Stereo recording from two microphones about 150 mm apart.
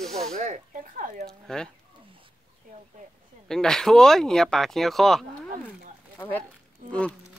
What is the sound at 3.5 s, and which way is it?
Speech, 5° left (ahead or behind).